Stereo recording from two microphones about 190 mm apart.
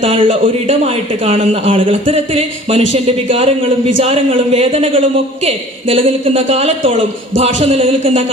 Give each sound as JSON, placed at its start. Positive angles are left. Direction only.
{"t": 0.0, "sound": "a man's voice", "side_deg": -30}